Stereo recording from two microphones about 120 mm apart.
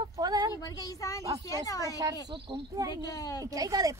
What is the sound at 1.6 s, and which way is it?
Speech, 30° left (ahead or behind).